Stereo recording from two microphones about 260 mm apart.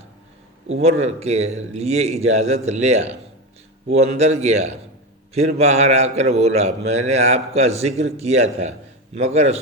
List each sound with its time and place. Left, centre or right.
0.7 s a man's voice: right